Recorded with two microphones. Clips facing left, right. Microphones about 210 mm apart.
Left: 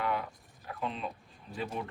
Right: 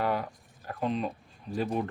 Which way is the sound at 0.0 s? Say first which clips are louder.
Right 4 dB; 40° right (ahead or behind).